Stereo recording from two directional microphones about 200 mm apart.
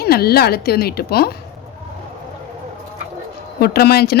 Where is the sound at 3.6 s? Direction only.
50° left (ahead or behind).